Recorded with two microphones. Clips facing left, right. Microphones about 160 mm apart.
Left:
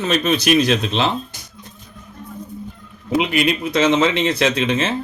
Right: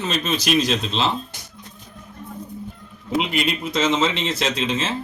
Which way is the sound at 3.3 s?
65° left (ahead or behind).